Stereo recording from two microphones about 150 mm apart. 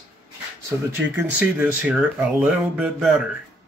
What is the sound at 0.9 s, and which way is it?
Speech, 15° right (ahead or behind).